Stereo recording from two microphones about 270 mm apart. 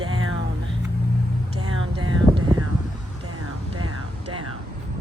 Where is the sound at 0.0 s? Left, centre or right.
Right.